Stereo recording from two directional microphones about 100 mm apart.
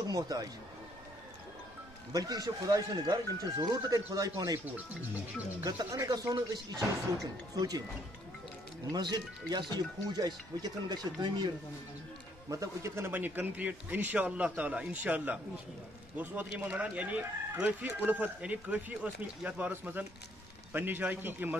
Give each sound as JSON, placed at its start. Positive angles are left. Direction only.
{"t": 0.1, "sound": "speech", "side_deg": -40}
{"t": 2.1, "sound": "speech", "side_deg": -40}
{"t": 5.6, "sound": "speech", "side_deg": -35}
{"t": 6.3, "sound": "speech", "side_deg": -45}
{"t": 8.9, "sound": "speech", "side_deg": -45}
{"t": 12.4, "sound": "a man's voice", "side_deg": -30}